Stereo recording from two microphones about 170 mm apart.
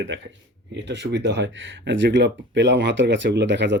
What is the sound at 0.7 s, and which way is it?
Speech, 90° right.